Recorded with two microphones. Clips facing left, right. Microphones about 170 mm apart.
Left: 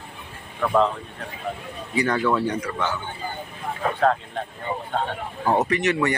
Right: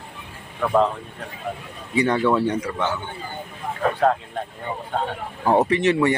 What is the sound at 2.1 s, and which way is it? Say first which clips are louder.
Speech: right 2 dB; 5° right (ahead or behind).